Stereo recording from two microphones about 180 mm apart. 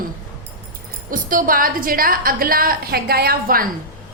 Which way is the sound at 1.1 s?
50° right (ahead or behind).